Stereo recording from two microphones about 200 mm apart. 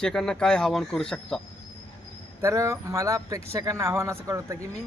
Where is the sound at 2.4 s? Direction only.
15° right (ahead or behind).